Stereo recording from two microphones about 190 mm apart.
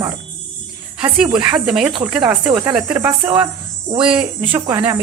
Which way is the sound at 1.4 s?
20° right (ahead or behind).